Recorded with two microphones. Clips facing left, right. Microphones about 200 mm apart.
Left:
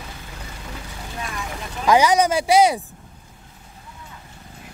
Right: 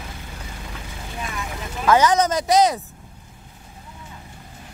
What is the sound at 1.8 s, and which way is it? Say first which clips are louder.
Speech: left 1 dB; 15° left (ahead or behind).